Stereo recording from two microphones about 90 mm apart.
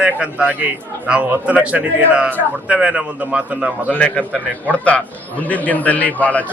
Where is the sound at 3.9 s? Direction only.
15° left (ahead or behind).